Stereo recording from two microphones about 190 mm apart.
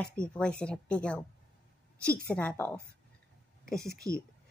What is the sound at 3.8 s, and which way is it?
Speech, 15° right (ahead or behind).